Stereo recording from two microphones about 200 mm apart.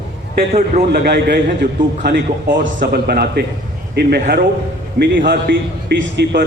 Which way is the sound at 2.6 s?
60° right (ahead or behind).